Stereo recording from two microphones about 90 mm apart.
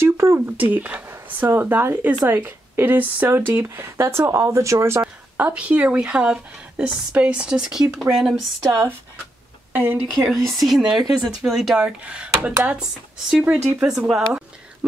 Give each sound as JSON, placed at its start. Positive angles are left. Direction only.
{"t": 0.0, "sound": "speech", "side_deg": -30}
{"t": 5.0, "sound": "speech", "side_deg": -15}
{"t": 9.7, "sound": "a sound", "side_deg": -20}
{"t": 10.2, "sound": "speech", "side_deg": 0}